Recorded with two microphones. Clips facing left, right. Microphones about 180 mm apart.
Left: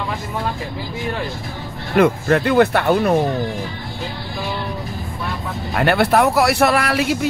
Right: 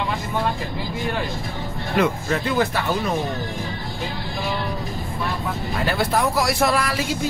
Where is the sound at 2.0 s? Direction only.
55° left (ahead or behind).